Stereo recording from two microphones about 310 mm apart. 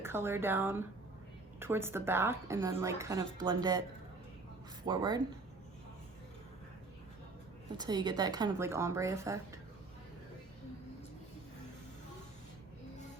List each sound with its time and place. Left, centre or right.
0.0 s a woman's voice: centre
4.9 s a woman's voice: centre
7.8 s a woman's voice: centre